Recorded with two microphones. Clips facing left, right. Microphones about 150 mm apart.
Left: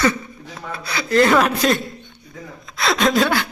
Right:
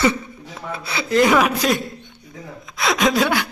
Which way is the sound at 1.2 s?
5° right (ahead or behind).